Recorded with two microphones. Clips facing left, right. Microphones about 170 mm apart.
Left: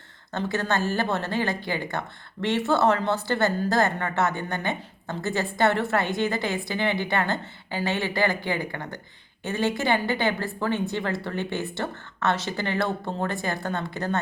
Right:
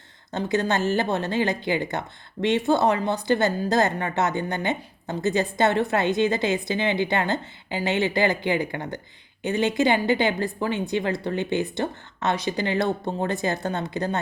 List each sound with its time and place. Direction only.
0.3 s speech: 20° right (ahead or behind)